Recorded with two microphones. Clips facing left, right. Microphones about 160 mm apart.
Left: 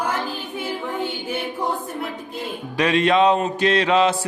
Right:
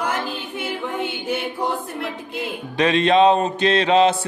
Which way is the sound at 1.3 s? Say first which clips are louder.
Right 3 dB; 75° right (ahead or behind).